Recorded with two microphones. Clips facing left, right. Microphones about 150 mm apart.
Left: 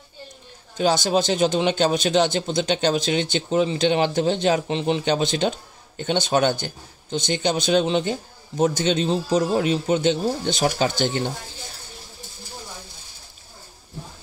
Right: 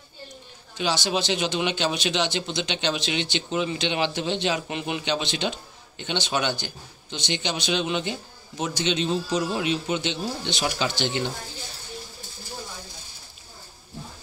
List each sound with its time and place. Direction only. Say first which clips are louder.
0.7 s a man's voice: left 6 dB; 45° left (ahead or behind)
4.6 s speech: left 7 dB; 30° left (ahead or behind)
5.0 s a man's voice: left 6 dB; 45° left (ahead or behind)